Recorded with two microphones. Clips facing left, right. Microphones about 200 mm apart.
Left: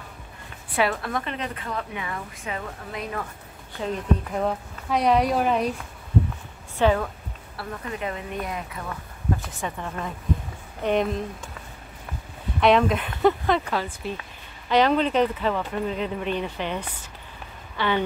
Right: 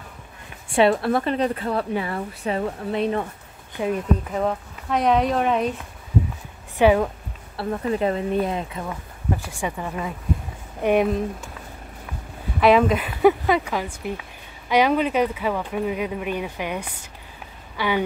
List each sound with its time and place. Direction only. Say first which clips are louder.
0.7 s a woman's voice: right 7 dB; 30° right (ahead or behind)
3.8 s speech: right 5 dB; 15° right (ahead or behind)
4.3 s speech: right 2 dB; centre (ahead or behind)
6.8 s speech: right 4 dB; 15° right (ahead or behind)
7.5 s a woman's voice: right 9 dB; 30° right (ahead or behind)
9.4 s speech: right 3 dB; 10° right (ahead or behind)
12.5 s speech: right 3 dB; 5° right (ahead or behind)